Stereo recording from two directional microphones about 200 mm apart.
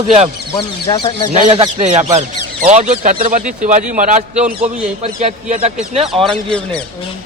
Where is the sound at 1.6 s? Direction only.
35° right (ahead or behind).